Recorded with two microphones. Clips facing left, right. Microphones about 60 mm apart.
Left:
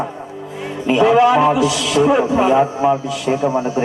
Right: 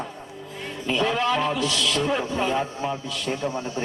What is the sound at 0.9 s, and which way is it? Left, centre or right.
A man's voice, centre.